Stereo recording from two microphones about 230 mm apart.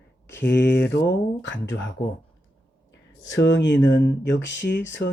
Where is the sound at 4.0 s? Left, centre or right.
Left.